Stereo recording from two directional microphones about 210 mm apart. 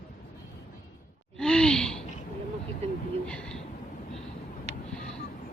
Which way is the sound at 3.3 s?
5° left (ahead or behind).